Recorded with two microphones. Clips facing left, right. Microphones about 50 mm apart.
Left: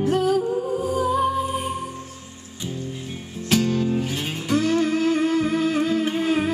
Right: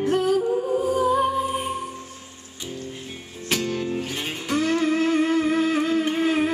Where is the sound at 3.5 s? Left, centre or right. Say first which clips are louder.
Left 4 dB; centre.